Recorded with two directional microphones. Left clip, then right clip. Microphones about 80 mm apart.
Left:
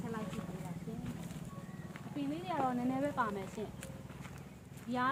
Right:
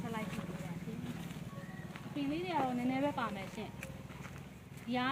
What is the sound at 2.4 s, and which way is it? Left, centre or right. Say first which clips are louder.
Speech: left 1 dB; left.